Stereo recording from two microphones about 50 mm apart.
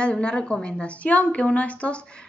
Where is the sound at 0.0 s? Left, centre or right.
Centre.